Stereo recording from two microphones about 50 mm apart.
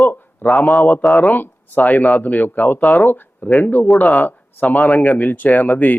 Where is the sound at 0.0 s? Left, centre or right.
Left.